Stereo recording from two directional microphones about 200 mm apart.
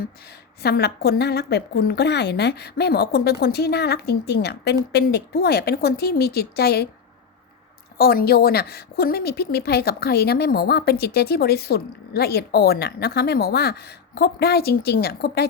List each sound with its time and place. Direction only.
0.6 s a woman's voice: 55° left (ahead or behind)
7.9 s a woman's voice: 50° left (ahead or behind)